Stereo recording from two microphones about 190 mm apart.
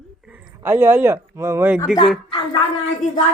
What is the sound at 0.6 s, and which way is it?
Speech, 10° right (ahead or behind).